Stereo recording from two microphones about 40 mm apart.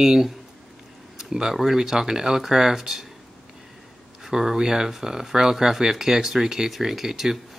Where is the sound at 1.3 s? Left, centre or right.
Centre.